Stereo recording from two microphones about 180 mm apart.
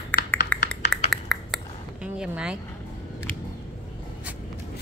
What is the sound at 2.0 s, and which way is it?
Speech, 5° right (ahead or behind).